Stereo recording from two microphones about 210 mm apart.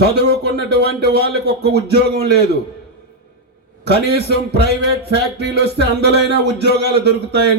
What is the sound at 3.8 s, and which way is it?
A man's voice, 50° right (ahead or behind).